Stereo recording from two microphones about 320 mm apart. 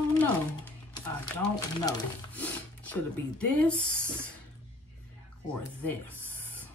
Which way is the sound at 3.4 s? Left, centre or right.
Centre.